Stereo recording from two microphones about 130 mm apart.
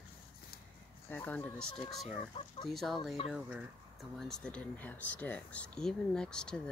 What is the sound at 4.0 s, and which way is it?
Speech, 5° left (ahead or behind).